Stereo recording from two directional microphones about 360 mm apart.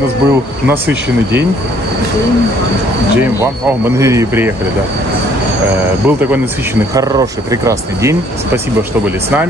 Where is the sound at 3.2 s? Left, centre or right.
Centre.